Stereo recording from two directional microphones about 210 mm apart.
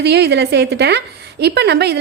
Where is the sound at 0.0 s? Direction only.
50° right (ahead or behind).